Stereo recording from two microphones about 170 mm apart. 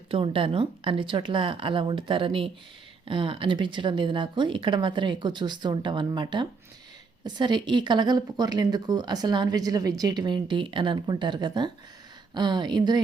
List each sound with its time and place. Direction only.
0.1 s a woman's voice: 30° right (ahead or behind)